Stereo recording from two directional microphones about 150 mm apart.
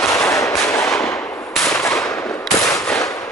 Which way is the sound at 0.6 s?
20° left (ahead or behind).